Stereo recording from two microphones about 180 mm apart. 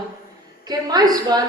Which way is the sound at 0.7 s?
20° right (ahead or behind).